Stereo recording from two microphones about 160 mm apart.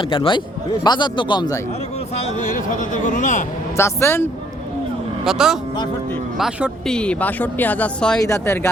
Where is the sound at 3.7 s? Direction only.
15° left (ahead or behind).